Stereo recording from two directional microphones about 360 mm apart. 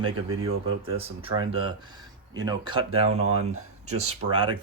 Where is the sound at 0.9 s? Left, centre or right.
Centre.